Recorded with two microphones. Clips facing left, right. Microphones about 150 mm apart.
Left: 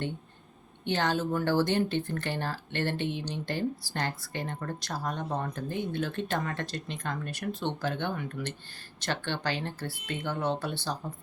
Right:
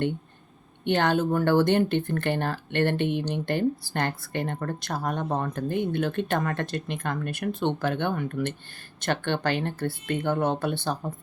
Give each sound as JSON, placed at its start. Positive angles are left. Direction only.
{"t": 0.9, "sound": "speech", "side_deg": -60}